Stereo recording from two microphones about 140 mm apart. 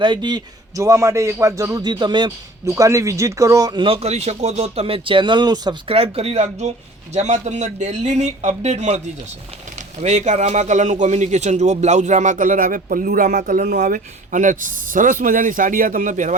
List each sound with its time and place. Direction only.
0.0 s a man's voice: 35° right (ahead or behind)
3.8 s speech: 45° right (ahead or behind)
5.9 s a man's voice: 45° right (ahead or behind)
10.0 s a man's voice: 55° right (ahead or behind)